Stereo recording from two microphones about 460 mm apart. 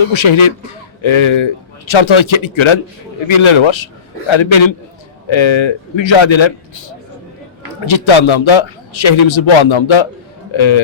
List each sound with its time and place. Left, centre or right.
0.0 s a man's voice: left
7.9 s a man's voice: left